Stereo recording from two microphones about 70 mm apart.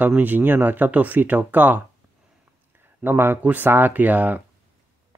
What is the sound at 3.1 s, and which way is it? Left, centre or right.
Speech, right.